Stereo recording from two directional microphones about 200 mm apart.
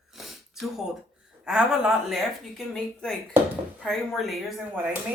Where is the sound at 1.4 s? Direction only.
5° right (ahead or behind).